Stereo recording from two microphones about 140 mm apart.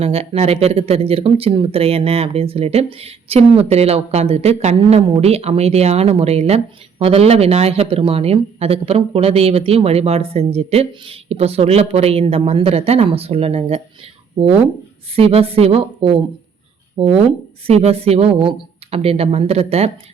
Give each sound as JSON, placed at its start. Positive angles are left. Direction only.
{"t": 0.0, "sound": "speech", "side_deg": -45}
{"t": 15.1, "sound": "speech", "side_deg": -45}
{"t": 17.7, "sound": "speech", "side_deg": -45}